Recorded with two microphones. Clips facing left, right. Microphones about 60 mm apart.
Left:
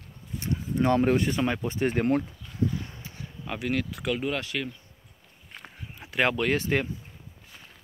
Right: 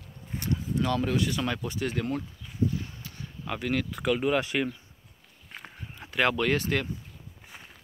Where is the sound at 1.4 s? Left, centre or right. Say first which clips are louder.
Left 3 dB; left.